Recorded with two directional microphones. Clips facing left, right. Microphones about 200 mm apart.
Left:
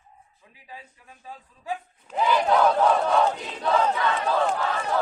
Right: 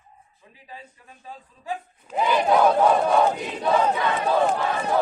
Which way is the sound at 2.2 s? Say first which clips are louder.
Right 2 dB; 15° right (ahead or behind).